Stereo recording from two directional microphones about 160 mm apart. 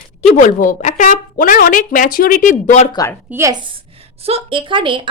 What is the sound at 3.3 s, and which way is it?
A woman's voice, 20° right (ahead or behind).